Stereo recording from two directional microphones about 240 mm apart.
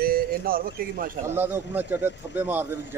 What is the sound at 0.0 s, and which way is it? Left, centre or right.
Speech, right.